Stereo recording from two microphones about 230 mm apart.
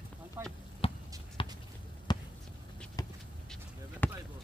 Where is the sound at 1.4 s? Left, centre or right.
Left.